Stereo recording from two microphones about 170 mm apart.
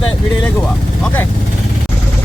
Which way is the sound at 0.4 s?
5° left (ahead or behind).